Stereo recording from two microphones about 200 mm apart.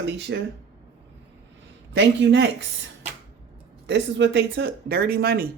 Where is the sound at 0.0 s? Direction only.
65° right (ahead or behind).